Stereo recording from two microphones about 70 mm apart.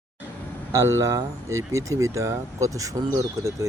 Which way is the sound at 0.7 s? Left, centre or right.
Right.